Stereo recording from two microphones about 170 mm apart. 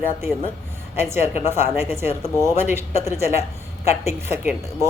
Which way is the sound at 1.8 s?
15° right (ahead or behind).